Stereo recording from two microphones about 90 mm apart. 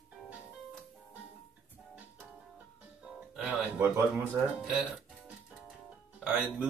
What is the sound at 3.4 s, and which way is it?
Speech, 15° right (ahead or behind).